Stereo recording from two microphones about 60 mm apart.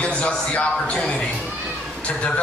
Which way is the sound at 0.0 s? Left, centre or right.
Left.